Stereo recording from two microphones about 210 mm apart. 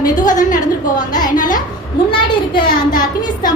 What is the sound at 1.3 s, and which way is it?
Speech, 40° left (ahead or behind).